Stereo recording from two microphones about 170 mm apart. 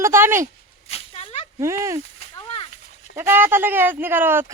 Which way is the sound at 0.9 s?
35° left (ahead or behind).